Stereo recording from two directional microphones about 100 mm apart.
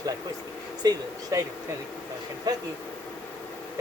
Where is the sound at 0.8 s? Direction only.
40° right (ahead or behind).